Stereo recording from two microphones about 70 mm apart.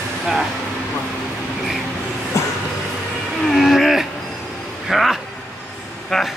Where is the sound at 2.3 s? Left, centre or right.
Left.